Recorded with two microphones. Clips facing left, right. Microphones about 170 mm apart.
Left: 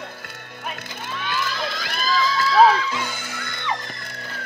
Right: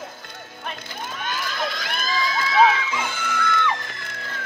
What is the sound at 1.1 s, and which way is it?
Crowd, 45° right (ahead or behind).